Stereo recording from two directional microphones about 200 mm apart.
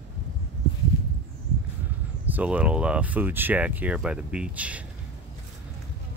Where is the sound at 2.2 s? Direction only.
10° right (ahead or behind).